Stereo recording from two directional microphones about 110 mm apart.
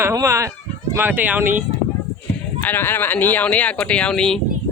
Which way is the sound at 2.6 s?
20° left (ahead or behind).